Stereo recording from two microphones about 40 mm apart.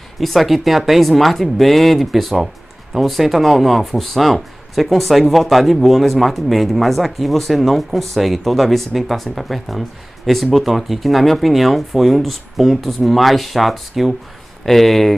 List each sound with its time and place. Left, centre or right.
0.2 s speech: centre